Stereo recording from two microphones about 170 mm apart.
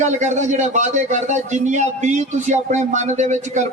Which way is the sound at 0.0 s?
45° right (ahead or behind).